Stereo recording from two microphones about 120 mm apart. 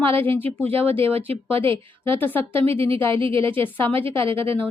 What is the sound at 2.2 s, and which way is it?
Speech, 15° left (ahead or behind).